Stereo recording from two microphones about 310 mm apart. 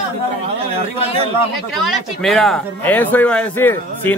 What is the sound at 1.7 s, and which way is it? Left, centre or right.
Speech, centre.